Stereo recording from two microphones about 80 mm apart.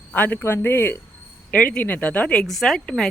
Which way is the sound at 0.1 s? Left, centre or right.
Left.